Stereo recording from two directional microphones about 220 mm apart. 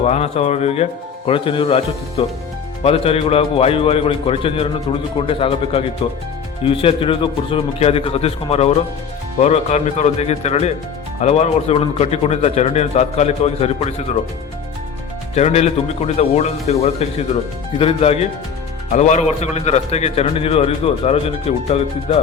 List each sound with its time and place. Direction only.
0.0 s a man's voice: 30° left (ahead or behind)
15.4 s a man's voice: 30° left (ahead or behind)